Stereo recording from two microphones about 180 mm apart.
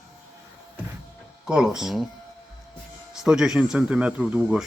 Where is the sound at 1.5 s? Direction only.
5° right (ahead or behind).